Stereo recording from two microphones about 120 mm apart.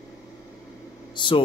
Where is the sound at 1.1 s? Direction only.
40° left (ahead or behind).